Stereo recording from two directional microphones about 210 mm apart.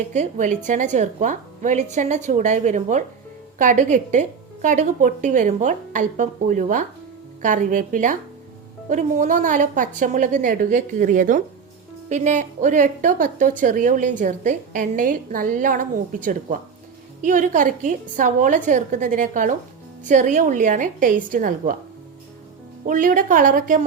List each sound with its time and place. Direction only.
0.1 s a woman's voice: 35° right (ahead or behind)
22.9 s a woman's voice: 40° right (ahead or behind)